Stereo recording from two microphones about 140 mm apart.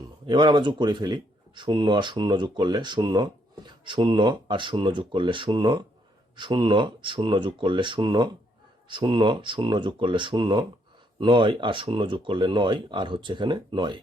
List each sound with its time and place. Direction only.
0.0 s speech: 35° right (ahead or behind)